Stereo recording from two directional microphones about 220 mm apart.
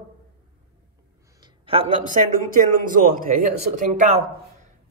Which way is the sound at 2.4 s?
40° right (ahead or behind).